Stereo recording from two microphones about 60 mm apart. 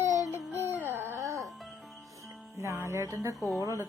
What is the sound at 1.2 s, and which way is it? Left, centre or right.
Music, right.